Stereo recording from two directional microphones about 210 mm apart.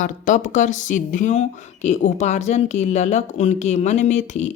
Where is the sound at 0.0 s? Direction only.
35° left (ahead or behind).